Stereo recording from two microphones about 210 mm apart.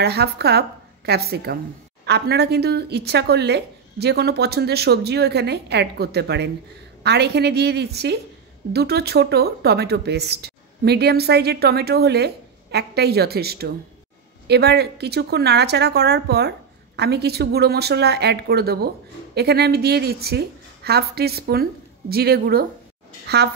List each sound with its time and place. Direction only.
0.0 s a woman's voice: 50° right (ahead or behind)